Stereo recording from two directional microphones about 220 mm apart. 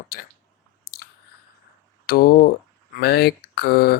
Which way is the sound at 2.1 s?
40° left (ahead or behind).